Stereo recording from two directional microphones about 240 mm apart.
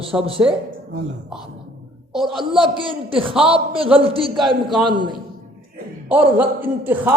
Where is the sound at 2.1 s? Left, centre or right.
Centre.